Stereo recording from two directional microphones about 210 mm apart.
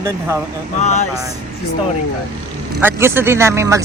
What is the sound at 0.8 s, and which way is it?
Speech, 35° left (ahead or behind).